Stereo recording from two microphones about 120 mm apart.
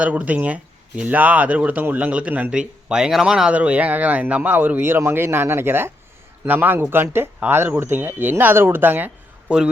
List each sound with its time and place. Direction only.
0.0 s speech: 10° right (ahead or behind)